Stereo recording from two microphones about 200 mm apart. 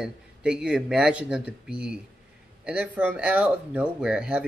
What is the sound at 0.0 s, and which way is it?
Speech, 5° right (ahead or behind).